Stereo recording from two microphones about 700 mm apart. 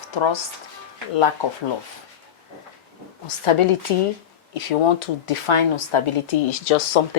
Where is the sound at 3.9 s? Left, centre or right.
Left.